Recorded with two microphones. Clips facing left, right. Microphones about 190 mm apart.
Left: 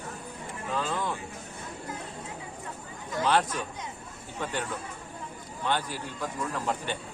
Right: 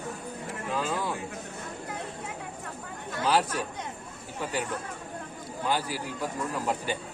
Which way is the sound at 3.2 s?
5° right (ahead or behind).